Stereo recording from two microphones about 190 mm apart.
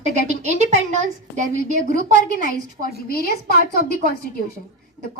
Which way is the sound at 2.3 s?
50° left (ahead or behind).